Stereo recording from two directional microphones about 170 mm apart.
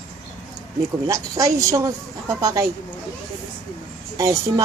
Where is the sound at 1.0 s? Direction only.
20° right (ahead or behind).